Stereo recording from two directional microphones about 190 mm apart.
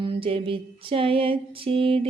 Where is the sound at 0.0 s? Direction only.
25° right (ahead or behind).